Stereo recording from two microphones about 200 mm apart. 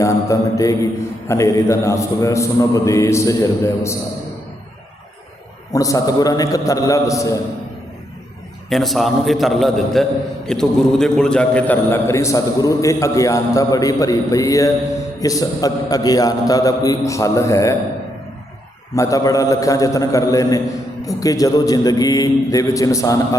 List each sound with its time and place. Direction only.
0.0 s mantra: 15° left (ahead or behind)
1.3 s a man's voice: 15° left (ahead or behind)
5.7 s a man's voice: 15° left (ahead or behind)
8.7 s a man's voice: centre (ahead or behind)
18.9 s a man's voice: 15° left (ahead or behind)